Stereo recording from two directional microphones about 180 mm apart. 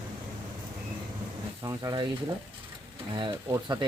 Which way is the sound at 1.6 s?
15° right (ahead or behind).